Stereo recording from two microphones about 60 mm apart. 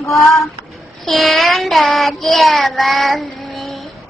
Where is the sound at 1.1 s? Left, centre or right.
Centre.